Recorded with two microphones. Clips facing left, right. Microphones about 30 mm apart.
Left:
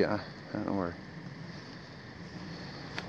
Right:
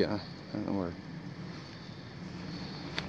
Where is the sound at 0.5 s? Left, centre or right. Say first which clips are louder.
Left 1 dB; centre.